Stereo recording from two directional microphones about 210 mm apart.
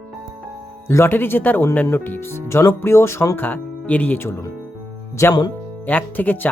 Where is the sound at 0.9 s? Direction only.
10° left (ahead or behind).